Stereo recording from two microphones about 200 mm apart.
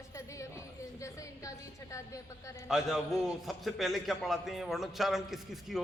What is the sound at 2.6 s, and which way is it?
A man's voice, centre (ahead or behind).